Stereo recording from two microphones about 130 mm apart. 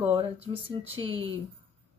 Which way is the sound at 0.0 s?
45° right (ahead or behind).